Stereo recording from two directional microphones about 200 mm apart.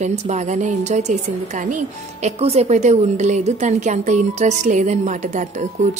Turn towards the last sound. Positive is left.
turn(degrees=-40)  # may be behind; listen again after turning